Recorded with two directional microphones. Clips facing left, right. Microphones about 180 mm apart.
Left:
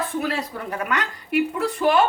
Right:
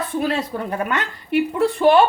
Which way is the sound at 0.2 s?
30° right (ahead or behind).